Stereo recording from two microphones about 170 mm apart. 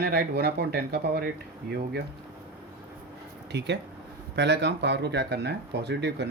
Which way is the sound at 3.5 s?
80° right.